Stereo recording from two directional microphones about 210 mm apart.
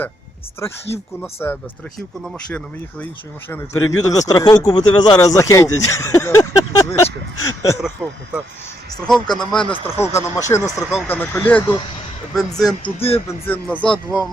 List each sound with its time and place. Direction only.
1.2 s speech: 10° left (ahead or behind)
3.7 s speech: 80° left
4.0 s speech: 15° left (ahead or behind)
9.0 s speech: 5° left (ahead or behind)
9.8 s speech: 10° left (ahead or behind)
12.6 s speech: 25° left (ahead or behind)
13.2 s speech: 10° left (ahead or behind)